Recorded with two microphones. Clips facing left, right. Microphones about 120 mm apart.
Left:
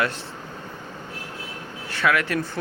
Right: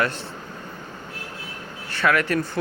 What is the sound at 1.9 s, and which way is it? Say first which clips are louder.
Speech: right 1 dB; 5° left (ahead or behind).